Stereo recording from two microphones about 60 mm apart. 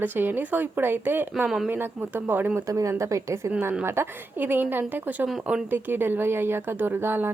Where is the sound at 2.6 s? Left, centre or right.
Right.